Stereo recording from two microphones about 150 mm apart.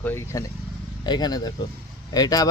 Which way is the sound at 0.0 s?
15° left (ahead or behind).